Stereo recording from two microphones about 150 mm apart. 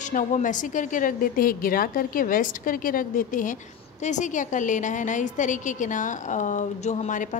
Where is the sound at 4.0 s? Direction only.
55° left (ahead or behind).